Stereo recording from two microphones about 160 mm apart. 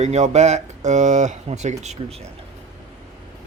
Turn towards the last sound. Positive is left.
turn(degrees=-40)  # may be behind; listen again after turning